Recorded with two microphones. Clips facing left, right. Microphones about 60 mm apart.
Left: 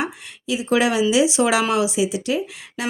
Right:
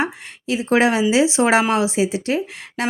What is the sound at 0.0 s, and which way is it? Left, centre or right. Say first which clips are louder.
Speech: right 3 dB; right.